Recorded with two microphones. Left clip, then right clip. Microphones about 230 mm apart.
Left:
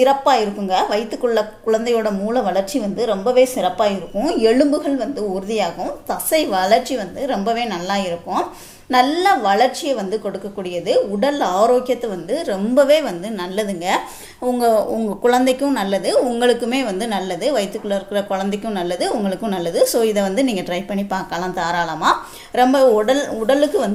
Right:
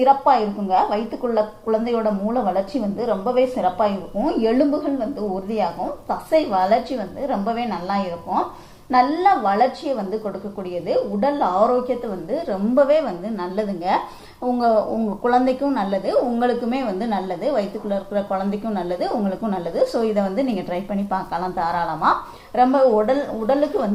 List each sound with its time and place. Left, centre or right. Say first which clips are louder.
0.0 s a woman's voice: left 1 dB; left
6.1 s a woman's voice: left 1 dB; left